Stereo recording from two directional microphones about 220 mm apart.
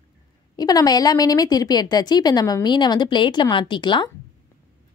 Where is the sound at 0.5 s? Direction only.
15° left (ahead or behind).